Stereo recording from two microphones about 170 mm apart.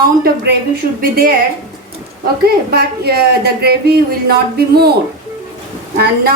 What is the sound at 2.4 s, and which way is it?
Speech, 65° right (ahead or behind).